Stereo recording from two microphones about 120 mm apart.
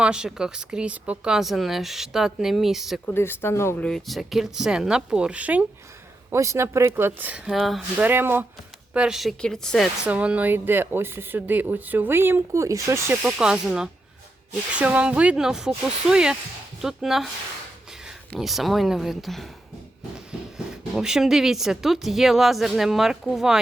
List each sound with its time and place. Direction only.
0.0 s a woman's voice: 5° right (ahead or behind)
3.2 s speech: 20° left (ahead or behind)
3.8 s a woman's voice: 5° left (ahead or behind); by 5.6 s 10° right (ahead or behind)
6.3 s speech: 25° right (ahead or behind); by 7.8 s centre (ahead or behind)
7.9 s a woman's voice: 15° right (ahead or behind); by 9.9 s 5° left (ahead or behind)
10.1 s speech: 10° right (ahead or behind)
13.2 s a woman's voice: 10° right (ahead or behind)
18.3 s a woman's voice: centre (ahead or behind)
20.9 s a woman's voice: 5° right (ahead or behind)